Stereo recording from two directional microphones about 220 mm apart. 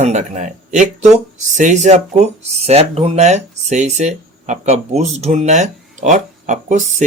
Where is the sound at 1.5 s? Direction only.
35° right (ahead or behind).